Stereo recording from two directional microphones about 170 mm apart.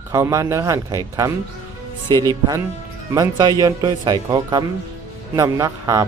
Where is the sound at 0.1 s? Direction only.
20° right (ahead or behind).